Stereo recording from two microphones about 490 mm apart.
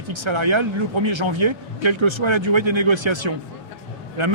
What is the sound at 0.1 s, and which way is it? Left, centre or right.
A man's voice, right.